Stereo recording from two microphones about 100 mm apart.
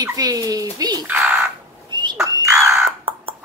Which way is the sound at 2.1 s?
30° right (ahead or behind).